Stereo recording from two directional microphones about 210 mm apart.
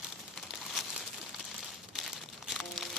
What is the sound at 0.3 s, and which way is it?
Crumpling, centre (ahead or behind).